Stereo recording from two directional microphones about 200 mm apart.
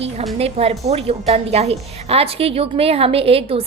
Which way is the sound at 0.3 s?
30° right (ahead or behind).